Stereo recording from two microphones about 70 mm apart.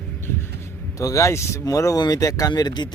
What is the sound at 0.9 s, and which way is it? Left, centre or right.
Speech, left.